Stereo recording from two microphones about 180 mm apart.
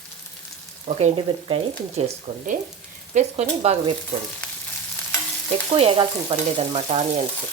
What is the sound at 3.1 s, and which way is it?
Frying, 40° right (ahead or behind).